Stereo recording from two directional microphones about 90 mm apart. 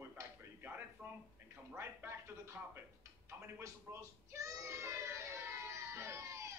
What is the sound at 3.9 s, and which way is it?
Speech, 20° right (ahead or behind).